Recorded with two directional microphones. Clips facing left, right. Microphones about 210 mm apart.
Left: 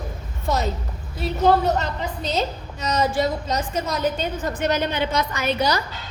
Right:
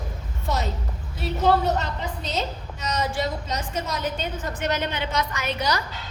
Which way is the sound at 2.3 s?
35° left (ahead or behind).